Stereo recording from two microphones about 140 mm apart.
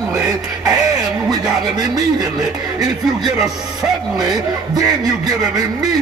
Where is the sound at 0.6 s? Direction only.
25° right (ahead or behind).